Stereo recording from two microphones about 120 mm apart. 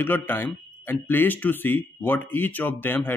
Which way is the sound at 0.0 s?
15° left (ahead or behind).